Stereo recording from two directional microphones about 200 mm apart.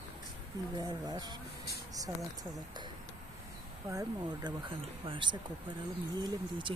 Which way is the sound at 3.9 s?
15° right (ahead or behind).